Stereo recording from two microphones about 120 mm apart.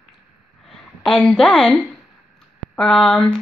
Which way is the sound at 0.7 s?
5° left (ahead or behind).